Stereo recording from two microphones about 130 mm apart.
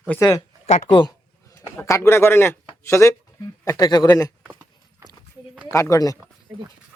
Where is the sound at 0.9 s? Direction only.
35° left (ahead or behind).